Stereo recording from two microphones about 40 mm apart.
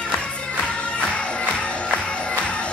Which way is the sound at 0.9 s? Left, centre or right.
Left.